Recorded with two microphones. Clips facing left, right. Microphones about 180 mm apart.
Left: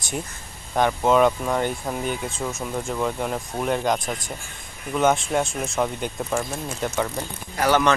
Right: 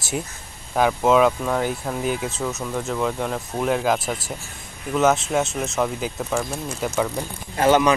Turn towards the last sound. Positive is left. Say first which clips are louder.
# right 3 dB
turn(degrees=-25)  # may be behind; listen again after turning